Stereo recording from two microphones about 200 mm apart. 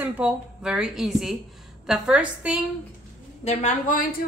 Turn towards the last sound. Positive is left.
turn(degrees=40)  # may be behind; listen again after turning